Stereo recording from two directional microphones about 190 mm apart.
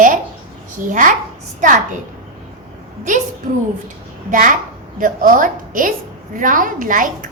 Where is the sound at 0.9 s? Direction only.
45° right (ahead or behind).